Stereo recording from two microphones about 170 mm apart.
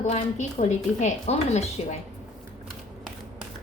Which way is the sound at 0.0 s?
40° left (ahead or behind).